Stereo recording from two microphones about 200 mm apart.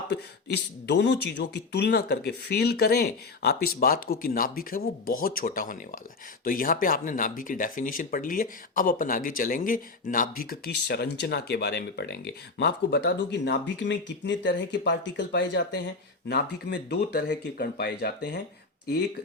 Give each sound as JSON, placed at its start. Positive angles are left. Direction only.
{"t": 0.1, "sound": "speech", "side_deg": 60}